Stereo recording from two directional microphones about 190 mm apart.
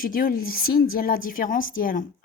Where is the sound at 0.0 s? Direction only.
50° left (ahead or behind).